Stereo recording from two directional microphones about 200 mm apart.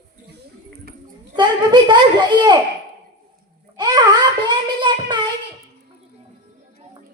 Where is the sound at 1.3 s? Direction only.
20° right (ahead or behind).